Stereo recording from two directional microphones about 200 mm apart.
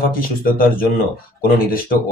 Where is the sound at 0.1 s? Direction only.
45° left (ahead or behind).